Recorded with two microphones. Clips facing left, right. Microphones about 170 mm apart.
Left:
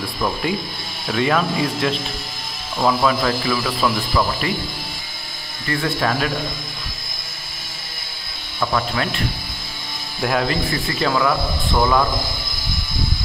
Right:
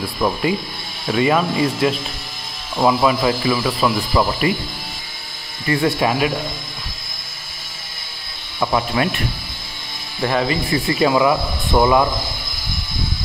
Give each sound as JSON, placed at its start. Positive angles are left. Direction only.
{"t": 0.2, "sound": "speech", "side_deg": -5}
{"t": 5.9, "sound": "speech", "side_deg": -10}
{"t": 8.5, "sound": "speech", "side_deg": -15}
{"t": 10.2, "sound": "speech", "side_deg": 0}
{"t": 10.7, "sound": "speech", "side_deg": -15}